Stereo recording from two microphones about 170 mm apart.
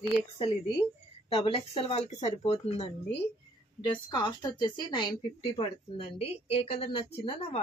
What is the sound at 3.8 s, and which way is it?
Speech, 25° left (ahead or behind).